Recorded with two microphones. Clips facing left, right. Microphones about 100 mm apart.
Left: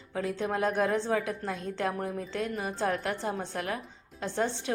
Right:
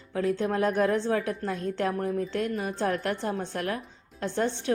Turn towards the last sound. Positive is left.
turn(degrees=5)  # may be behind; listen again after turning